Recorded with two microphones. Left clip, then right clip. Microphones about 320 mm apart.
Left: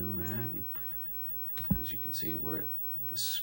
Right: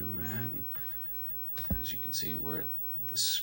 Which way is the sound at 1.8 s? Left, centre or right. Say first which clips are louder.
Right 4 dB; centre.